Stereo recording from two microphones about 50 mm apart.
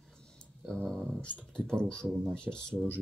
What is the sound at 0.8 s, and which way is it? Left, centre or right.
Speech, centre.